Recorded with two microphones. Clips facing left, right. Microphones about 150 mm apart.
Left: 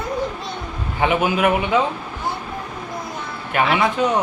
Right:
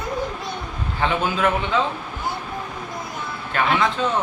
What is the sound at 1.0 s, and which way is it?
Speech, 15° left (ahead or behind).